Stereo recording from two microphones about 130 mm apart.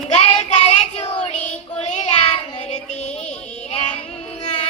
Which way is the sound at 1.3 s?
60° left (ahead or behind).